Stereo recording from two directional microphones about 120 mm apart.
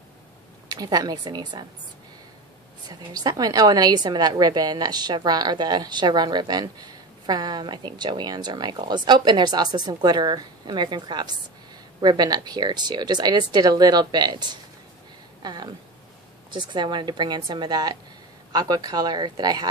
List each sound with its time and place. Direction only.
0.7 s a woman's voice: 35° right (ahead or behind)
2.9 s a woman's voice: 35° right (ahead or behind)